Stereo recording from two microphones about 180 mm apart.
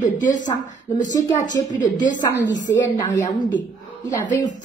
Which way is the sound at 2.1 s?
85° left.